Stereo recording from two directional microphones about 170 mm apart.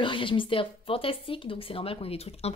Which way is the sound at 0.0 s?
30° left (ahead or behind).